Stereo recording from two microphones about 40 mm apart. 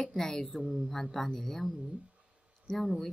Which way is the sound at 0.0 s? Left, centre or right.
Centre.